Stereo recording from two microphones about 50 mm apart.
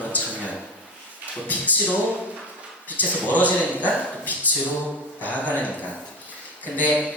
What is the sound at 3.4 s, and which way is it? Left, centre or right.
Speech, left.